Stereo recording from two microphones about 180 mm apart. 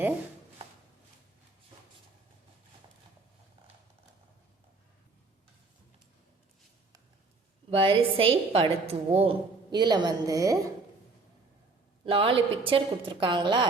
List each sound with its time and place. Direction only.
7.7 s a woman's voice: 30° right (ahead or behind)
12.0 s a woman's voice: 30° right (ahead or behind)